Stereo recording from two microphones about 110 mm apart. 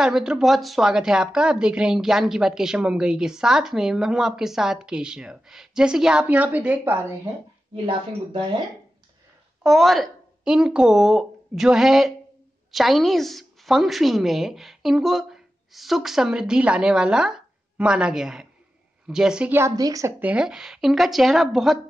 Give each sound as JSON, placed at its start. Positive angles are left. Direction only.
{"t": 0.0, "sound": "a woman's voice", "side_deg": -5}
{"t": 7.7, "sound": "a woman's voice", "side_deg": -55}
{"t": 9.6, "sound": "a woman's voice", "side_deg": 0}
{"t": 19.5, "sound": "a woman's voice", "side_deg": -30}
{"t": 20.2, "sound": "a woman's voice", "side_deg": -15}